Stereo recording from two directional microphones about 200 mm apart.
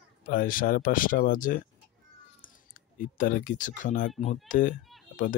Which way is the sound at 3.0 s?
45° left (ahead or behind).